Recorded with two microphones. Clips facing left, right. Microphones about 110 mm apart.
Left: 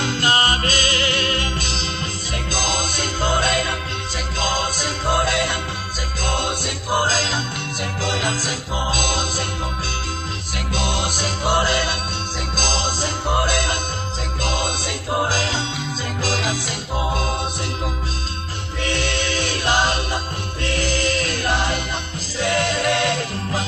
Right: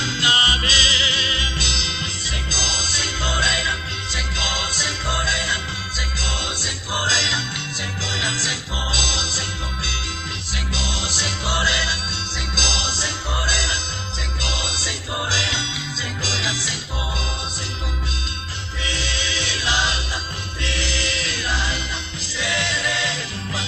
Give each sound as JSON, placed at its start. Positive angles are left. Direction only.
{"t": 0.0, "sound": "music", "side_deg": 50}
{"t": 2.3, "sound": "music", "side_deg": 55}
{"t": 18.8, "sound": "music", "side_deg": 55}